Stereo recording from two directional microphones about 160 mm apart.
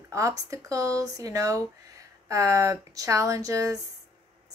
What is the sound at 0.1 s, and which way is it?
A woman's voice, 20° right (ahead or behind).